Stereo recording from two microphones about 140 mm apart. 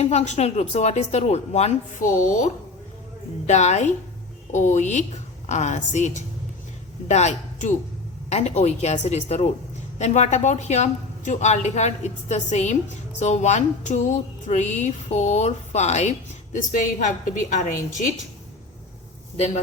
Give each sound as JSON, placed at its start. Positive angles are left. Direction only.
{"t": 0.0, "sound": "speech", "side_deg": 55}
{"t": 3.4, "sound": "a man's voice", "side_deg": 55}